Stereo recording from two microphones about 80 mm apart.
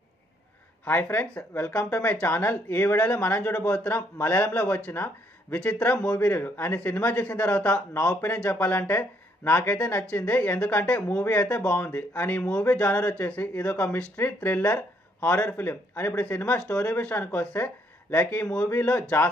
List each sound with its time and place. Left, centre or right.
0.8 s speech: left
6.2 s speech: left